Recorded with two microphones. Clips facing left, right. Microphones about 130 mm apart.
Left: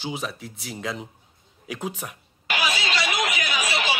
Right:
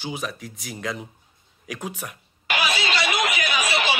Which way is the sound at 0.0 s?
10° right (ahead or behind).